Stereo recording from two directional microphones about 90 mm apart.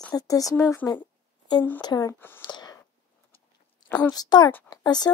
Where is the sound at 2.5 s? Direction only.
50° left (ahead or behind).